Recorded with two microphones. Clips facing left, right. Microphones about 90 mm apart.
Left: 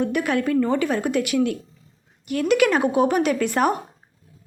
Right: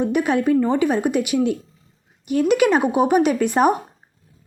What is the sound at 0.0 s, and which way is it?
Speech, 20° right (ahead or behind).